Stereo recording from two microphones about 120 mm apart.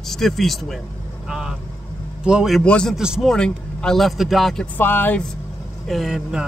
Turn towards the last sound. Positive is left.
turn(degrees=-5)  # may be behind; listen again after turning